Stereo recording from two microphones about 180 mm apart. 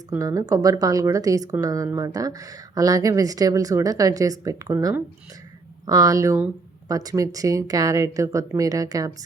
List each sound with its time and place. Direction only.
0.2 s speech: 20° right (ahead or behind)